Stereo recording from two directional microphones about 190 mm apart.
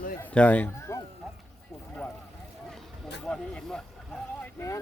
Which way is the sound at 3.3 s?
5° left (ahead or behind).